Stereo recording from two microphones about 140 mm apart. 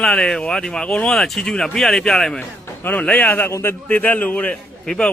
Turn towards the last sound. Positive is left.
turn(degrees=5)  # may be behind; listen again after turning